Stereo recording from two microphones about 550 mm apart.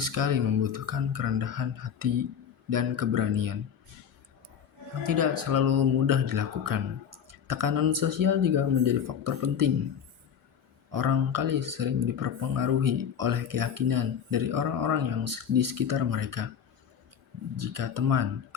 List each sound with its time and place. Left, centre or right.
0.0 s speech: right
5.0 s speech: right
10.9 s speech: right
17.6 s speech: right